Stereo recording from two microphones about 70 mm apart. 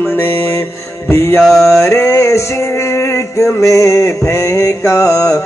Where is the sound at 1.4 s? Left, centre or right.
Centre.